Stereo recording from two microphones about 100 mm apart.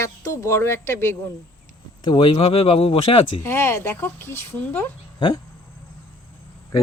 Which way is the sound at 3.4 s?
25° left (ahead or behind).